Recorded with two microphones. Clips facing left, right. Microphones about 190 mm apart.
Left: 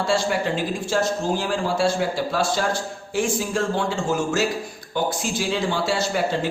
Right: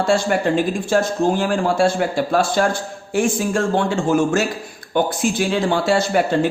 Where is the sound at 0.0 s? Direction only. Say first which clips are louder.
Right 4 dB; 50° right (ahead or behind).